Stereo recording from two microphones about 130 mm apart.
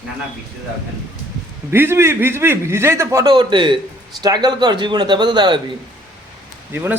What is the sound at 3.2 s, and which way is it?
Speech, 40° right (ahead or behind).